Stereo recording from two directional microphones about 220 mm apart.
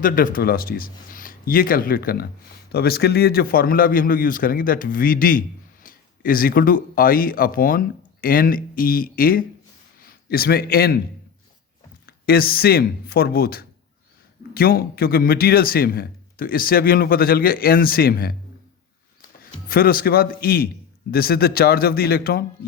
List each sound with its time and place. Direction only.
0.0 s a man's voice: 40° left (ahead or behind)
12.0 s speech: 45° left (ahead or behind)
19.4 s a man's voice: 40° left (ahead or behind)